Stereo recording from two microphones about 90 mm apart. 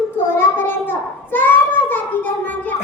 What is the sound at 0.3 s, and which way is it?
Child singing, 25° left (ahead or behind).